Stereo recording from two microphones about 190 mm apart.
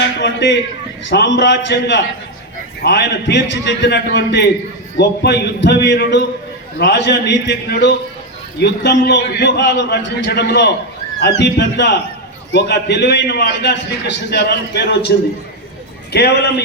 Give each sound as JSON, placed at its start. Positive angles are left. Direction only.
{"t": 0.2, "sound": "a man's voice", "side_deg": 70}
{"t": 16.1, "sound": "a man's voice", "side_deg": 60}